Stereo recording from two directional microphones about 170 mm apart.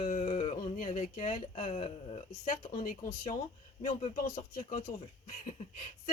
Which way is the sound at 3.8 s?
50° left (ahead or behind).